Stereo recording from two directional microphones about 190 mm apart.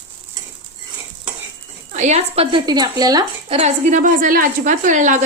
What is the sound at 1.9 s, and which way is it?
Speech, 35° right (ahead or behind).